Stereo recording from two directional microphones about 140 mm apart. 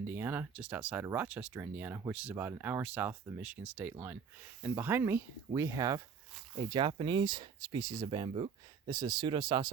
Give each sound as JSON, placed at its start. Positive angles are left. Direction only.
{"t": 0.1, "sound": "speech", "side_deg": -15}